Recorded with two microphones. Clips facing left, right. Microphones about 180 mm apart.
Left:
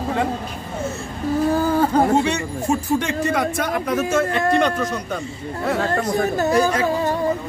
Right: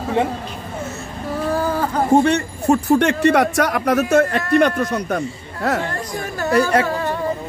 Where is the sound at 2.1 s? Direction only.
55° right (ahead or behind).